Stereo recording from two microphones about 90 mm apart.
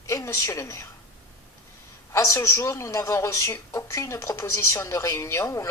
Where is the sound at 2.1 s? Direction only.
35° left (ahead or behind).